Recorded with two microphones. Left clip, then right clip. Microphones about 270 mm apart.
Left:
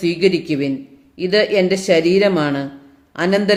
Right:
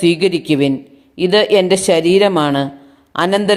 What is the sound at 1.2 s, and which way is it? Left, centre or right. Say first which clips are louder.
Speech: right 4 dB; right.